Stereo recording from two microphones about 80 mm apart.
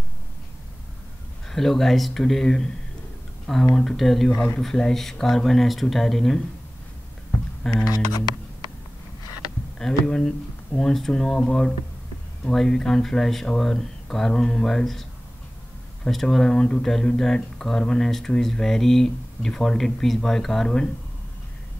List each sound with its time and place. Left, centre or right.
1.5 s speech: centre
3.7 s speech: centre
7.7 s speech: left
9.8 s speech: centre